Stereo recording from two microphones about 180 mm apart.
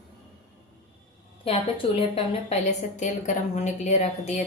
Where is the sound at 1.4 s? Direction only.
30° left (ahead or behind).